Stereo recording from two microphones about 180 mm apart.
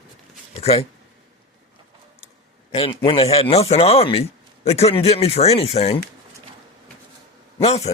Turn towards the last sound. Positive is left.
turn(degrees=35)  # may be behind; listen again after turning